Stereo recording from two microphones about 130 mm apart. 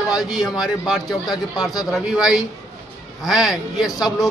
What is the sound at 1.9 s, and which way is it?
A man's voice, 5° right (ahead or behind).